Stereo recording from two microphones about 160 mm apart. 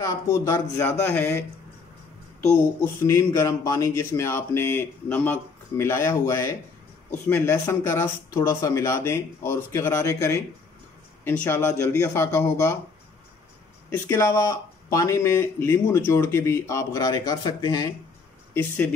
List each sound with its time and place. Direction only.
0.0 s speech: 20° left (ahead or behind)
2.8 s speech: 15° left (ahead or behind)
13.8 s speech: 15° left (ahead or behind)
18.5 s speech: 10° left (ahead or behind)